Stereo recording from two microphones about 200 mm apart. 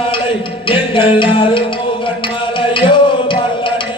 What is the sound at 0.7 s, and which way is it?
Music, 25° left (ahead or behind).